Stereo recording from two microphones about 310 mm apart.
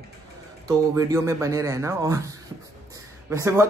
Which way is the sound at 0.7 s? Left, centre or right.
Centre.